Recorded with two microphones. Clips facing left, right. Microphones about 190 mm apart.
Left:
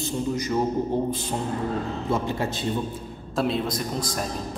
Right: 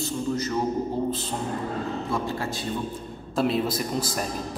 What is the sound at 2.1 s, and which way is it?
Speech, 20° left (ahead or behind).